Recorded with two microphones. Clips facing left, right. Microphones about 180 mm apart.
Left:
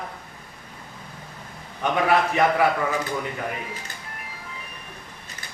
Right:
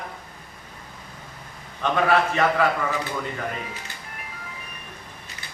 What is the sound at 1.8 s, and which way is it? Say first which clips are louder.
Speech: even; 15° left (ahead or behind).